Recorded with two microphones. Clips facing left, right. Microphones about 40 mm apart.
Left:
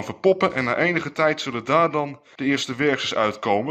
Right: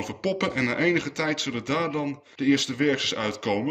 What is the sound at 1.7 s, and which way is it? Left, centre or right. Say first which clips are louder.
Speech: left 8 dB; left.